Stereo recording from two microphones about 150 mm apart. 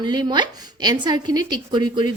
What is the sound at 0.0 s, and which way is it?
A woman's voice, 30° right (ahead or behind).